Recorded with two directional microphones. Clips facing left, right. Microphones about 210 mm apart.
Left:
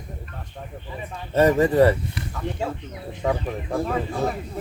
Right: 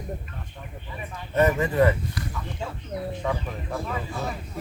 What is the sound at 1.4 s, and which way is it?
Speech, 35° left (ahead or behind).